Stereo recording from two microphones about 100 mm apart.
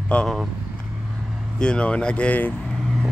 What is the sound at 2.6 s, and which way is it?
Vehicle, 5° left (ahead or behind).